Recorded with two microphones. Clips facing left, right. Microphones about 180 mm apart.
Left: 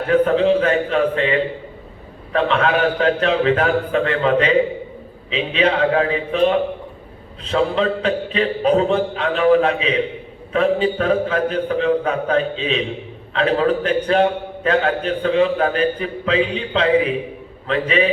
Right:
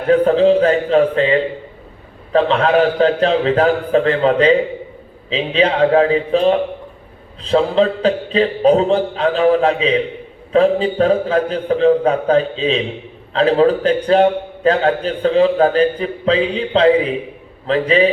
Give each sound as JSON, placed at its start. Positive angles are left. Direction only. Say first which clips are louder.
{"t": 0.1, "sound": "a man's voice", "louder": "right 4 dB", "side_deg": -35}